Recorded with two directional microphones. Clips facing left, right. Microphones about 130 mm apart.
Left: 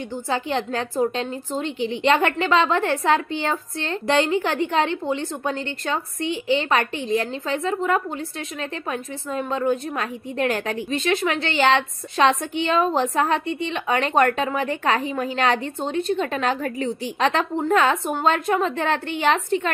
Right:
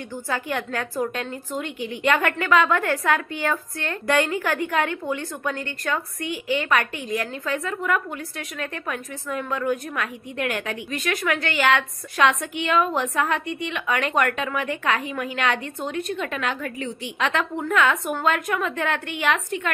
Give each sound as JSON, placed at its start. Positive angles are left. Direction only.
{"t": 0.1, "sound": "a woman's voice", "side_deg": 25}